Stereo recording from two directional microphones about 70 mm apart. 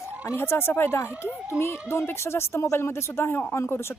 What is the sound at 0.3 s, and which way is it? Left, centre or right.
Speech, left.